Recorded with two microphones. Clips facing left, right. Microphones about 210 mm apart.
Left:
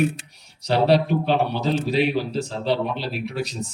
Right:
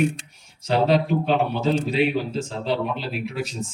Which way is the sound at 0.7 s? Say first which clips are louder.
Left 1 dB; 35° left (ahead or behind).